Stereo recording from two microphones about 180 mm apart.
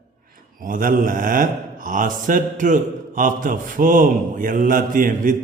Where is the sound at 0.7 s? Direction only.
50° right (ahead or behind).